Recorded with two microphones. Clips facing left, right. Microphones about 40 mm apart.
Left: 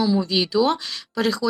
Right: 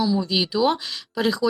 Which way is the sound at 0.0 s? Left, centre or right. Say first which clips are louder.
Left 1 dB; centre.